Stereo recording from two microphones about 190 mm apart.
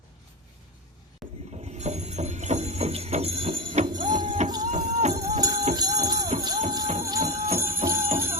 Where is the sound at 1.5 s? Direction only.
35° right (ahead or behind).